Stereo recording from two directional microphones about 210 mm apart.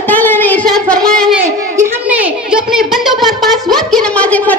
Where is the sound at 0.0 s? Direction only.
10° left (ahead or behind).